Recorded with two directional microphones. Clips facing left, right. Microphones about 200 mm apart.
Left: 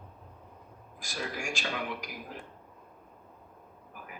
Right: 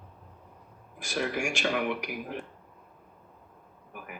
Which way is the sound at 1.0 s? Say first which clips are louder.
Right 7 dB; 65° right (ahead or behind).